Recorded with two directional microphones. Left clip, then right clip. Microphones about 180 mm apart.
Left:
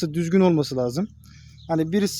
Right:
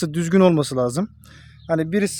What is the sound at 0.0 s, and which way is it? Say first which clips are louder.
Speech: right 4 dB; 55° right (ahead or behind).